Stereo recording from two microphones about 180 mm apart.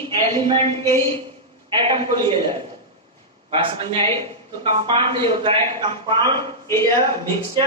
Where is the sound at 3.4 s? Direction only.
30° right (ahead or behind).